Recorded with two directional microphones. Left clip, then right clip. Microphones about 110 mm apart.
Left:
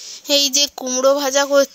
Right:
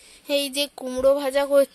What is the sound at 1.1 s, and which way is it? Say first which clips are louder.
Child singing: left 4 dB; 45° left (ahead or behind).